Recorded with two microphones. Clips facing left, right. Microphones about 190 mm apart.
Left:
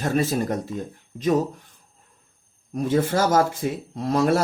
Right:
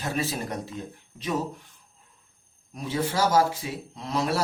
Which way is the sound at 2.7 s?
50° left (ahead or behind).